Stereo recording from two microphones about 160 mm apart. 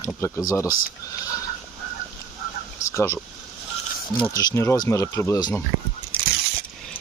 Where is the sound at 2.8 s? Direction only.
20° left (ahead or behind).